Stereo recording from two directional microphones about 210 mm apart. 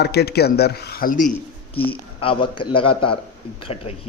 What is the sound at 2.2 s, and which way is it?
A man's voice, 25° left (ahead or behind).